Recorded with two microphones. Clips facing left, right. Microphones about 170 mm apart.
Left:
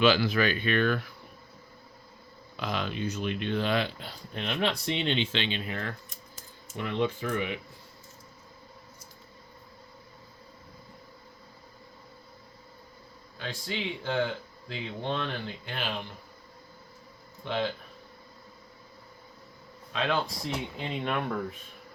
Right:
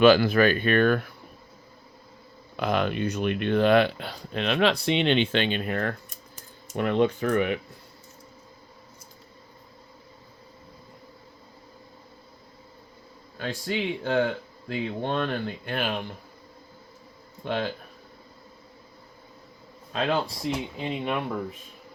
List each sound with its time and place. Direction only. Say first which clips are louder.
0.0 s speech: right 6 dB; 50° right (ahead or behind)
2.6 s speech: right 7 dB; 55° right (ahead or behind)
13.4 s speech: right 6 dB; 45° right (ahead or behind)
19.9 s speech: right 3 dB; 35° right (ahead or behind)
20.5 s speech: right 4 dB; 10° right (ahead or behind)